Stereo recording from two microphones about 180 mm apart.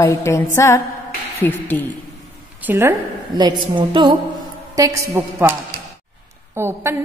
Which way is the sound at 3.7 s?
25° right (ahead or behind).